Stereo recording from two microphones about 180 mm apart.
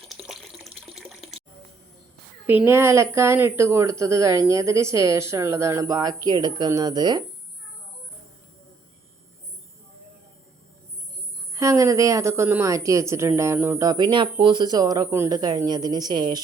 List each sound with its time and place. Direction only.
0.0 s water: centre (ahead or behind)
2.5 s a woman's voice: 10° right (ahead or behind)
11.5 s a woman's voice: 15° right (ahead or behind)